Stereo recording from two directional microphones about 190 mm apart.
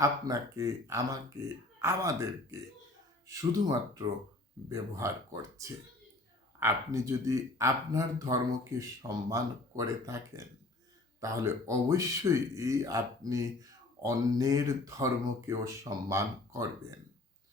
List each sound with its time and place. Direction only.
0.0 s speech: 15° right (ahead or behind)